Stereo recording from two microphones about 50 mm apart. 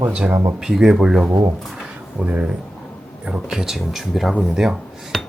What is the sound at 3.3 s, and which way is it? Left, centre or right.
Speech, centre.